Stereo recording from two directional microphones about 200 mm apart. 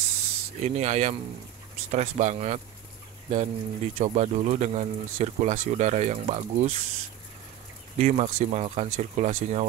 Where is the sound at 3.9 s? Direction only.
35° right (ahead or behind).